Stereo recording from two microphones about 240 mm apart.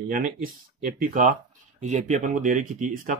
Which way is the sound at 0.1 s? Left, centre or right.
Right.